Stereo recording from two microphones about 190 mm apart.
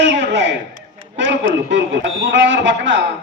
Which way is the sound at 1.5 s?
65° right (ahead or behind).